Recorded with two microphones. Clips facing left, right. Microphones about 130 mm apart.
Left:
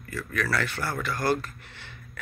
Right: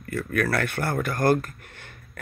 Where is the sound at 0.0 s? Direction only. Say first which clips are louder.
Right 5 dB; 55° right (ahead or behind).